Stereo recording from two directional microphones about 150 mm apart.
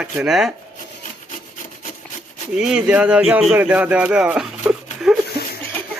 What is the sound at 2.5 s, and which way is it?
Speech, 5° right (ahead or behind).